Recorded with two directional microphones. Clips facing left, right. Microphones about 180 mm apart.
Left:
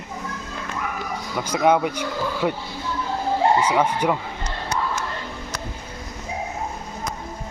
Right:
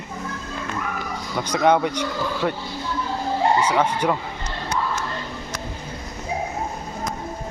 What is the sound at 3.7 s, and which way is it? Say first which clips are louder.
Speech: even; 10° left (ahead or behind).